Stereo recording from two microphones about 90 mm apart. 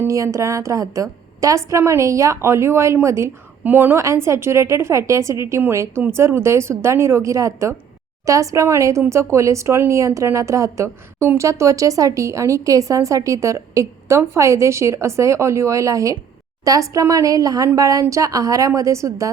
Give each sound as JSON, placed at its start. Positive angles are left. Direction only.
{"t": 0.0, "sound": "a woman's voice", "side_deg": -35}
{"t": 3.6, "sound": "a woman's voice", "side_deg": -20}
{"t": 4.0, "sound": "a woman's voice", "side_deg": -30}